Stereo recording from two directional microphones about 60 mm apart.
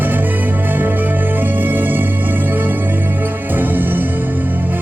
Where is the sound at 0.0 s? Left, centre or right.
Right.